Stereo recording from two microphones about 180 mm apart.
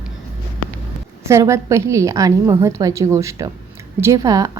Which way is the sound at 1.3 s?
15° right (ahead or behind).